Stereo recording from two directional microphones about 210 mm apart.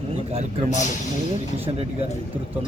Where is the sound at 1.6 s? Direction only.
30° right (ahead or behind).